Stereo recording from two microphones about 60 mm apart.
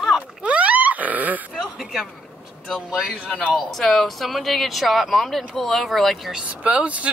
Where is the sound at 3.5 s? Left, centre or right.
Centre.